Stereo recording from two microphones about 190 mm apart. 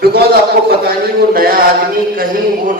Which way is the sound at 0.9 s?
50° right (ahead or behind).